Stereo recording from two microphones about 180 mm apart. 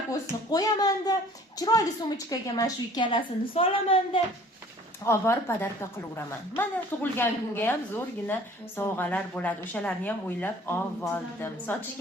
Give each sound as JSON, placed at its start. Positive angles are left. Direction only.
{"t": 0.1, "sound": "a woman's voice", "side_deg": 20}
{"t": 5.0, "sound": "a woman's voice", "side_deg": 15}